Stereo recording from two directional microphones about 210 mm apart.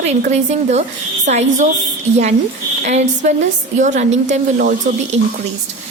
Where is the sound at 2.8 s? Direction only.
35° right (ahead or behind).